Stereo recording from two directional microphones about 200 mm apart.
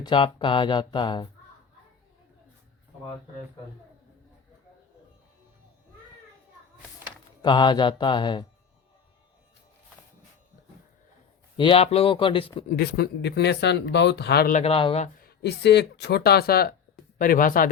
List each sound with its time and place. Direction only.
0.0 s speech: 25° left (ahead or behind)
7.4 s speech: 25° left (ahead or behind)
11.5 s speech: 25° left (ahead or behind)
12.6 s speech: 55° left (ahead or behind)
14.5 s speech: 30° left (ahead or behind)
15.2 s speech: 55° left (ahead or behind)